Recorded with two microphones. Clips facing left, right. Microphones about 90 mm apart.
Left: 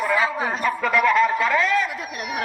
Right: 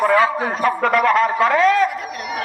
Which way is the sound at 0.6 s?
50° right (ahead or behind).